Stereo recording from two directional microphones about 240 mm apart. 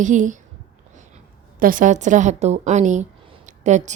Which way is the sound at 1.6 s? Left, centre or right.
Right.